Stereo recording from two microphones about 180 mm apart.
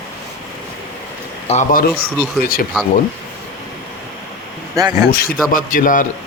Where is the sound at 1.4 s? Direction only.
45° left (ahead or behind).